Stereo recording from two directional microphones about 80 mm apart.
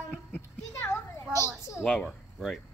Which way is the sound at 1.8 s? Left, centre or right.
Centre.